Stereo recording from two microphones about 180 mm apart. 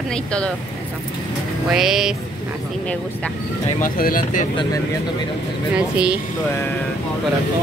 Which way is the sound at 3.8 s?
55° left (ahead or behind).